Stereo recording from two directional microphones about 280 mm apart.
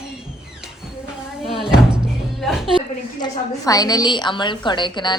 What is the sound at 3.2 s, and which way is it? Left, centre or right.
A woman's voice, centre.